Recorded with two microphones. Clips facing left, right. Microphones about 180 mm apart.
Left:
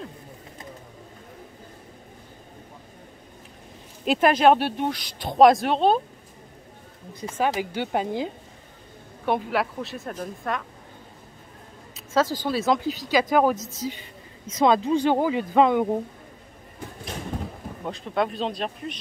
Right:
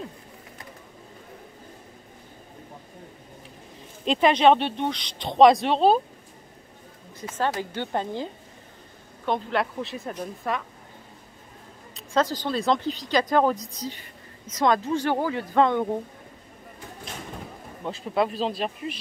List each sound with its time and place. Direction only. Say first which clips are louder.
4.0 s a woman's voice: even; 5° left (ahead or behind)
7.2 s a woman's voice: left 2 dB; 10° left (ahead or behind)
12.1 s a woman's voice: left 1 dB; 5° left (ahead or behind)
17.8 s a woman's voice: right 1 dB; centre (ahead or behind)